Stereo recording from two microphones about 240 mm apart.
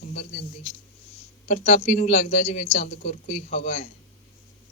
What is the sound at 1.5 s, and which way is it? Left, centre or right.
Speech, left.